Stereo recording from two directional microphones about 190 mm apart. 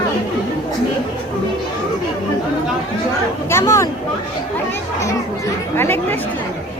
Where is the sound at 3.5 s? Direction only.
15° left (ahead or behind).